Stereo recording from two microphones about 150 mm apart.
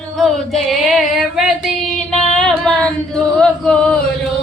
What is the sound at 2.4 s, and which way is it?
Singing, 5° left (ahead or behind).